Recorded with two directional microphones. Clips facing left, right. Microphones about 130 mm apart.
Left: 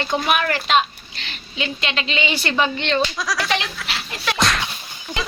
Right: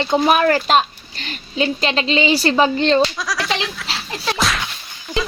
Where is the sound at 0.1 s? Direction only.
35° right (ahead or behind).